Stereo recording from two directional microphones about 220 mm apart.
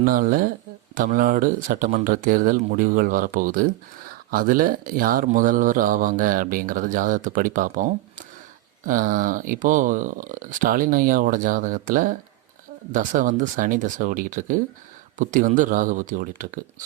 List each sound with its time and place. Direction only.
0.0 s speech: 40° right (ahead or behind)
8.9 s speech: 35° right (ahead or behind)